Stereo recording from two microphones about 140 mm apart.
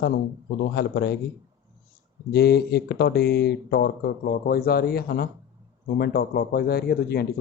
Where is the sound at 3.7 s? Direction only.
90° left.